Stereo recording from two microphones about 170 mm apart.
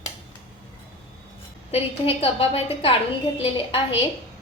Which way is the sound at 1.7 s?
35° left (ahead or behind).